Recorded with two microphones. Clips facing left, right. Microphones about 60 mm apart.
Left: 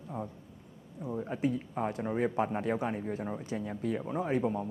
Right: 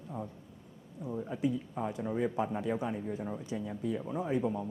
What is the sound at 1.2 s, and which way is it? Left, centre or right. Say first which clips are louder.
Speech: left 1 dB; left.